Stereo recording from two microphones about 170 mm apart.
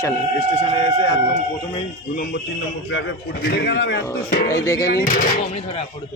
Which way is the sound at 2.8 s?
90° left.